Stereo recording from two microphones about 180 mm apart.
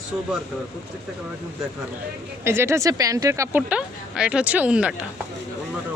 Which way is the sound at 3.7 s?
5° right (ahead or behind).